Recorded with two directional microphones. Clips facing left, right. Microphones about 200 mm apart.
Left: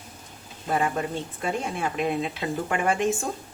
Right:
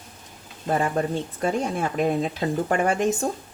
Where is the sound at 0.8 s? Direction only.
40° right (ahead or behind).